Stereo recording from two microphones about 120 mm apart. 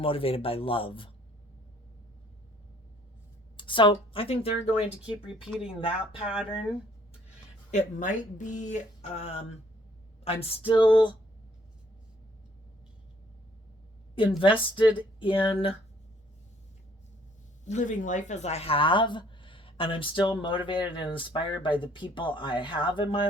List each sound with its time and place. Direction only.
0.0 s speech: 50° left (ahead or behind)
3.6 s speech: 45° left (ahead or behind)
7.7 s speech: 90° left; by 11.1 s 40° left (ahead or behind)
14.3 s speech: 45° left (ahead or behind)
17.7 s speech: 85° left; by 23.2 s 45° left (ahead or behind)